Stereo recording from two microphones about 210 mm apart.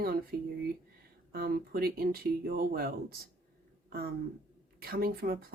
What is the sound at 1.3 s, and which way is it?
Speech, 50° right (ahead or behind).